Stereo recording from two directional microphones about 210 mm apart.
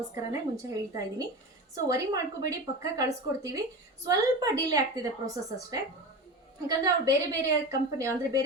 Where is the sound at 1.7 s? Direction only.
15° right (ahead or behind).